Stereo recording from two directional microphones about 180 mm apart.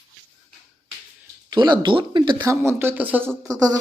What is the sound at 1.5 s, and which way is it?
Speech, 25° right (ahead or behind).